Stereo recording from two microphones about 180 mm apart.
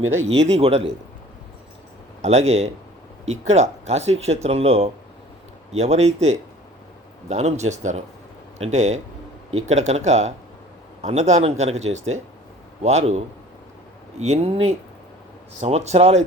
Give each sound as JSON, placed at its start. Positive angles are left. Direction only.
{"t": 0.2, "sound": "speech", "side_deg": -90}
{"t": 0.5, "sound": "speech", "side_deg": -35}
{"t": 2.2, "sound": "a man's voice", "side_deg": -35}
{"t": 15.6, "sound": "speech", "side_deg": -35}